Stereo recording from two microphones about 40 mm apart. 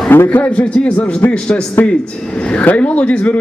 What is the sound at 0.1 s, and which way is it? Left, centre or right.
Speech, left.